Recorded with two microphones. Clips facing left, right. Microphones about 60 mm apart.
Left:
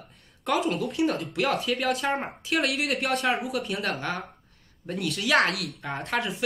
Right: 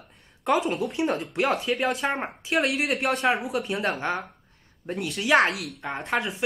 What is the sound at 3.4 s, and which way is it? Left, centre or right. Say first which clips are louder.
Speech: right 2 dB; right.